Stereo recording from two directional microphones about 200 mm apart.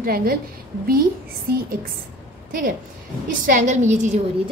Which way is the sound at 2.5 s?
45° right (ahead or behind).